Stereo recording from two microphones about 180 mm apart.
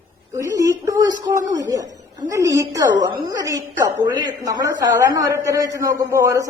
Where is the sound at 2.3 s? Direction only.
15° right (ahead or behind).